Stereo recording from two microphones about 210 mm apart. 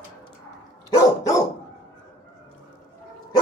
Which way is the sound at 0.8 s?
15° left (ahead or behind).